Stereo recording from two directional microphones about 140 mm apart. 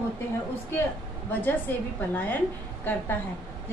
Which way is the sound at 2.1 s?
10° left (ahead or behind).